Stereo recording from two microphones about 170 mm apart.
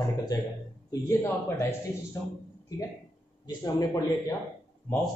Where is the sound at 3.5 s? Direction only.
20° left (ahead or behind).